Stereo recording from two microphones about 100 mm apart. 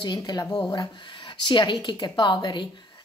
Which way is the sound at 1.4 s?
50° left (ahead or behind).